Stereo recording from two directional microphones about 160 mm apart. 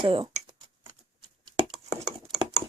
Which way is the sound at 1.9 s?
25° right (ahead or behind).